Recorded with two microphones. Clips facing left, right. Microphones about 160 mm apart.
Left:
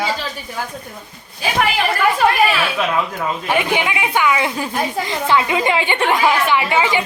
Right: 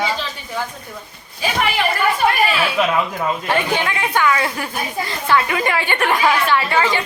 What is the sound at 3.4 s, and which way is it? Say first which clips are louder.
Speech: left 3 dB; 15° left (ahead or behind).